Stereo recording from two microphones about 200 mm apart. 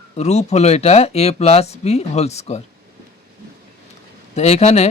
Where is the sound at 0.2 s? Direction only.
35° left (ahead or behind).